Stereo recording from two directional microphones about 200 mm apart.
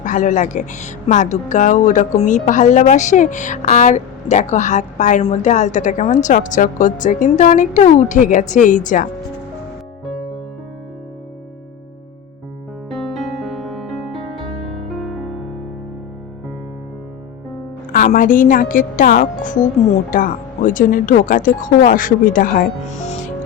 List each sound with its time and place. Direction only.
0.0 s speech: 40° left (ahead or behind)
12.9 s music: centre (ahead or behind)
17.9 s speech: 40° left (ahead or behind)
23.0 s music: 35° left (ahead or behind)